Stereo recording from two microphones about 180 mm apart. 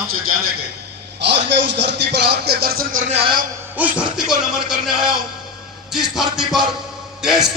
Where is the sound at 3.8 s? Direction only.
5° right (ahead or behind).